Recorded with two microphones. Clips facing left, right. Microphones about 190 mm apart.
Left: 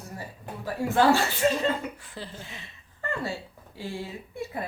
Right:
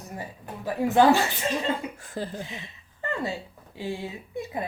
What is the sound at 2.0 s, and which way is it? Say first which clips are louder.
Speech: right 7 dB; 45° right (ahead or behind).